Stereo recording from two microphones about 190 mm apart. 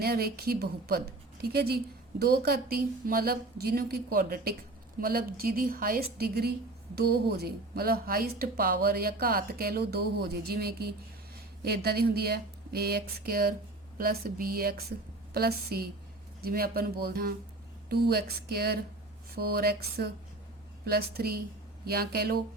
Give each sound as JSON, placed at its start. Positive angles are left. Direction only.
{"t": 0.0, "sound": "a woman's voice", "side_deg": -55}